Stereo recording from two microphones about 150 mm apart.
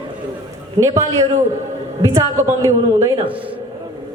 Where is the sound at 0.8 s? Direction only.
25° right (ahead or behind).